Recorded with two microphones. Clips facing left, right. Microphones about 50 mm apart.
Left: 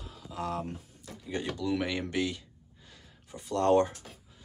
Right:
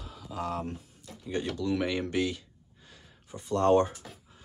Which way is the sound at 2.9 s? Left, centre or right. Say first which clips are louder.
Right 2 dB; centre.